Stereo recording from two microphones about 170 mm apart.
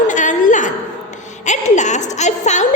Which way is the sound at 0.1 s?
45° left (ahead or behind).